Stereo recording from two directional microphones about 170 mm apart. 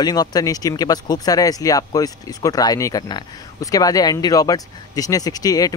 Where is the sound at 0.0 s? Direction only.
25° left (ahead or behind).